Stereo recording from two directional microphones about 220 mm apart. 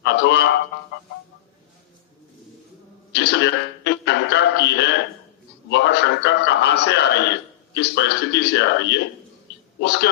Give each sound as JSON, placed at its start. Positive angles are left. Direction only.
{"t": 0.0, "sound": "a man's voice", "side_deg": 50}
{"t": 3.1, "sound": "a man's voice", "side_deg": 50}